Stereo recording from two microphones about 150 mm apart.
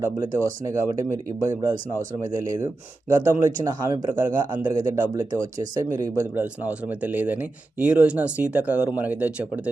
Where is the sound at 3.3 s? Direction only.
20° right (ahead or behind).